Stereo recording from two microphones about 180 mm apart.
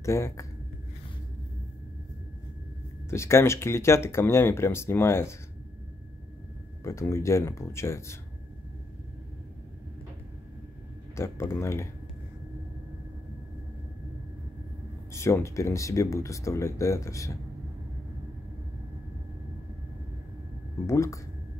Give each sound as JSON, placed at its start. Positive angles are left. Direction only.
{"t": 0.0, "sound": "speech", "side_deg": 15}
{"t": 3.1, "sound": "speech", "side_deg": 15}
{"t": 6.8, "sound": "speech", "side_deg": 15}
{"t": 11.1, "sound": "speech", "side_deg": 15}
{"t": 15.1, "sound": "speech", "side_deg": 15}
{"t": 20.8, "sound": "speech", "side_deg": 15}